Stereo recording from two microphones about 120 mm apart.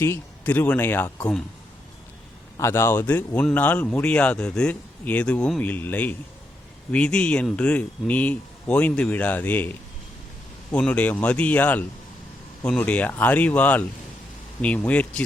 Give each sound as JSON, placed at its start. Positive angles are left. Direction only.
{"t": 0.0, "sound": "speech", "side_deg": 20}
{"t": 2.6, "sound": "speech", "side_deg": 20}